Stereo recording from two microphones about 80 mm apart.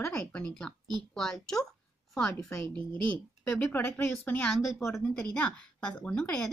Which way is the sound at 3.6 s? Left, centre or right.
Left.